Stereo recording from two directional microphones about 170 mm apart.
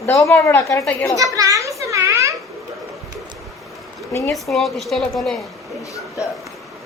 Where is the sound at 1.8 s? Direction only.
15° right (ahead or behind).